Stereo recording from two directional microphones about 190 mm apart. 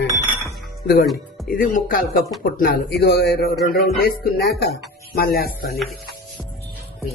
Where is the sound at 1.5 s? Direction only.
45° left (ahead or behind).